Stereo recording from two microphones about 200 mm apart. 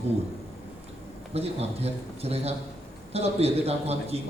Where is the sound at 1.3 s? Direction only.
30° right (ahead or behind).